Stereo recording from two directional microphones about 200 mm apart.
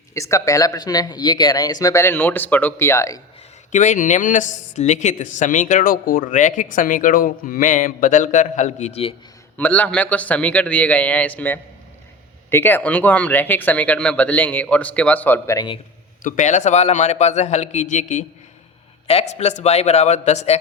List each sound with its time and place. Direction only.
0.1 s speech: 15° left (ahead or behind)
3.7 s speech: 35° left (ahead or behind)
9.6 s speech: 5° left (ahead or behind)
16.2 s speech: 40° left (ahead or behind)
19.3 s speech: 35° left (ahead or behind)